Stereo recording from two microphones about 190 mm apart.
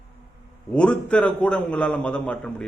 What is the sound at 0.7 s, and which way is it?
A man's voice, 5° left (ahead or behind).